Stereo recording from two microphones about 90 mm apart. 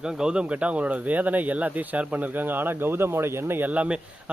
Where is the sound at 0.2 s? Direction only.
10° right (ahead or behind).